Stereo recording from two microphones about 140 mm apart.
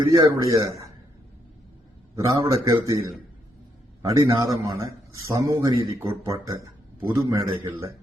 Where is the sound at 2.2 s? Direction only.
20° right (ahead or behind).